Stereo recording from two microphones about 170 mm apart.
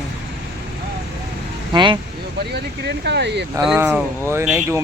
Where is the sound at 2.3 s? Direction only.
75° right (ahead or behind).